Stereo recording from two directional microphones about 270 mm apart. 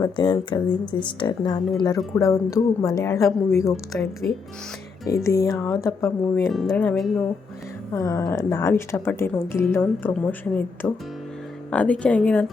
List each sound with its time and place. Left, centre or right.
0.0 s a woman's voice: centre
7.9 s a woman's voice: centre